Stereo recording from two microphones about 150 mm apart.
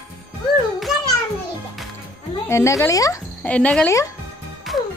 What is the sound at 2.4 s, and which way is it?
Speech, 20° left (ahead or behind).